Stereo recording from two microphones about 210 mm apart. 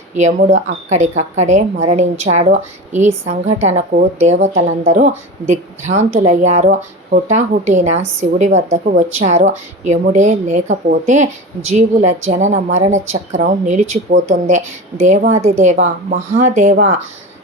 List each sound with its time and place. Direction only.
0.2 s a woman's voice: 35° right (ahead or behind)